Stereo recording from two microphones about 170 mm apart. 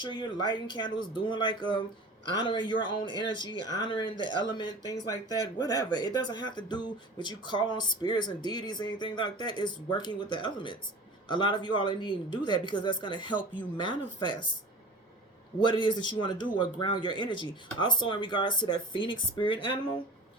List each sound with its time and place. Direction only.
0.0 s speech: 25° left (ahead or behind)
15.6 s speech: 25° left (ahead or behind)